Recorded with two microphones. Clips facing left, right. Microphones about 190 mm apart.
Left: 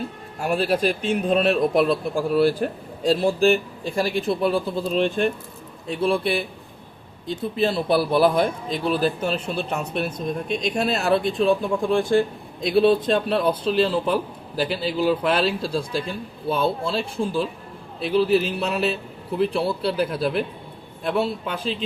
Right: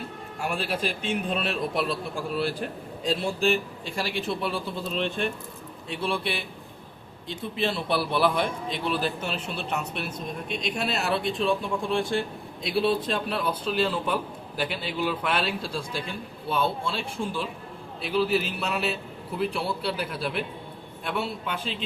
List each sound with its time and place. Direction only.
0.4 s a man's voice: 40° left (ahead or behind)